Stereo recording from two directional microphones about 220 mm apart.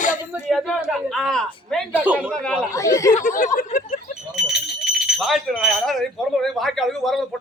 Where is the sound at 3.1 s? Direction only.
35° left (ahead or behind).